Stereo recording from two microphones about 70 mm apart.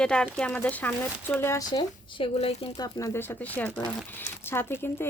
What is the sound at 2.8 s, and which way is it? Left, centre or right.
Speech, left.